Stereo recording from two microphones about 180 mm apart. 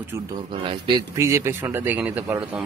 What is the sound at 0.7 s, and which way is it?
Speech, 25° right (ahead or behind).